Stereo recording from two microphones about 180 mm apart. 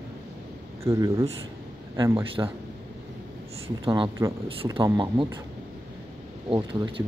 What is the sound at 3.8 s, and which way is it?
Speech, 25° right (ahead or behind).